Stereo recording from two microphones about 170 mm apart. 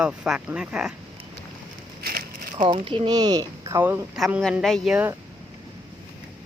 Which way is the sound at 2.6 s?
30° right (ahead or behind).